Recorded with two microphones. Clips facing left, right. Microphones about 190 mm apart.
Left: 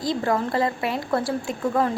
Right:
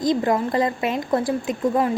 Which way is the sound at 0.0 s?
20° right (ahead or behind).